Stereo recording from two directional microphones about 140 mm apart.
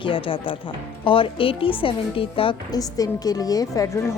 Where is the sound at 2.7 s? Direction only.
25° left (ahead or behind).